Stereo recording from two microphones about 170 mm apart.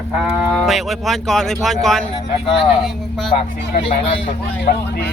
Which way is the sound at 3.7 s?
35° left (ahead or behind).